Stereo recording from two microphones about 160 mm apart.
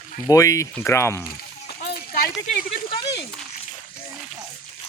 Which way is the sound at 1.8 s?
80° left.